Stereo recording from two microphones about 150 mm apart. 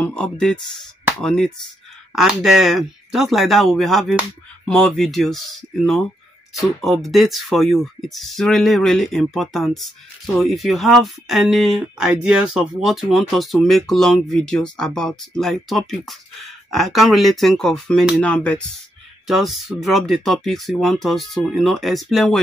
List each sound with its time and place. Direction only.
0.0 s speech: 5° left (ahead or behind)
6.6 s speech: centre (ahead or behind)